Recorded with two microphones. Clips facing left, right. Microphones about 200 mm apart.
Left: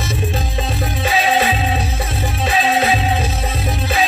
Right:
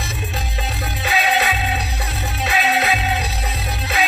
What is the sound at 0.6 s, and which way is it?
Music, 30° left (ahead or behind).